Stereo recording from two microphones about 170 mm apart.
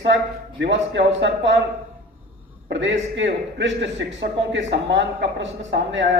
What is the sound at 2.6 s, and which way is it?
A man's voice, 90° right.